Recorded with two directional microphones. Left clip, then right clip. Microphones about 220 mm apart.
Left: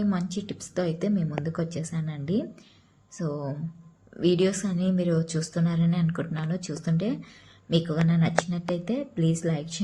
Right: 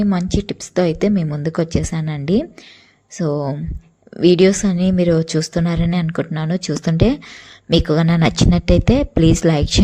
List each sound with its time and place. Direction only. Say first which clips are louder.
0.0 s a woman's voice: right 10 dB; 35° right (ahead or behind)